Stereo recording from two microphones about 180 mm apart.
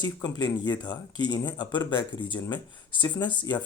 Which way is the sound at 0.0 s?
25° left (ahead or behind).